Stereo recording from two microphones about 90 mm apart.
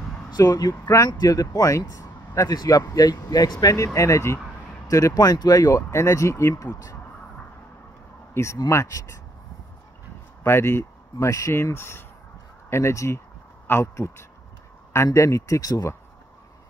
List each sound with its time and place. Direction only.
0.3 s speech: 45° left (ahead or behind)
6.5 s speech: 45° left (ahead or behind)
8.6 s speech: 30° left (ahead or behind)
10.4 s speech: 30° left (ahead or behind)